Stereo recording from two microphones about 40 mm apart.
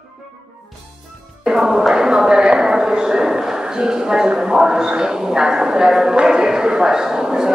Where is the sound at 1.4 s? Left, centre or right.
Centre.